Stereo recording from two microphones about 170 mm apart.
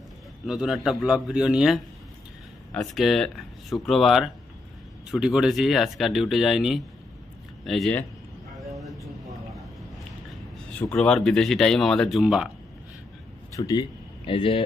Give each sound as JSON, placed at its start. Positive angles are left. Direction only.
{"t": 0.5, "sound": "speech", "side_deg": -5}
{"t": 10.8, "sound": "speech", "side_deg": 5}
{"t": 13.6, "sound": "speech", "side_deg": 25}